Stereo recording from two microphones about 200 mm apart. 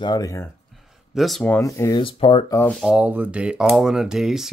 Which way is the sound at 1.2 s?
Centre (ahead or behind).